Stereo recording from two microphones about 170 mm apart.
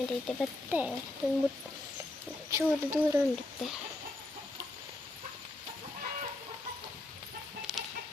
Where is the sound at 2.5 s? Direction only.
15° right (ahead or behind).